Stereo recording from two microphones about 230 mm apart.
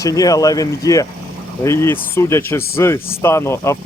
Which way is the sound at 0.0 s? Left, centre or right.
Centre.